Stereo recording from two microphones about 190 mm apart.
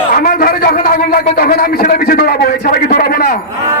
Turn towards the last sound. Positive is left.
turn(degrees=50)  # may be behind; listen again after turning